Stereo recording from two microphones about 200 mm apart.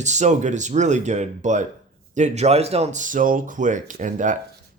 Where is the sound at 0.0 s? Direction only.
35° right (ahead or behind).